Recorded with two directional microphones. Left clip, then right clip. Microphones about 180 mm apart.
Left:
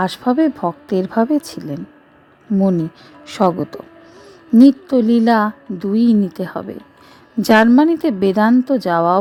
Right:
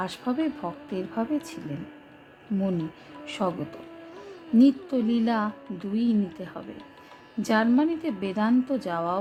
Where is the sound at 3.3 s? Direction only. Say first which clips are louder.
Left 13 dB; 50° left (ahead or behind).